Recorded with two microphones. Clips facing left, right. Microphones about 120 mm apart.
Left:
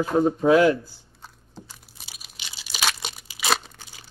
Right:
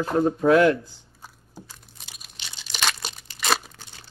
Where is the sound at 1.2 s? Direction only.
10° right (ahead or behind).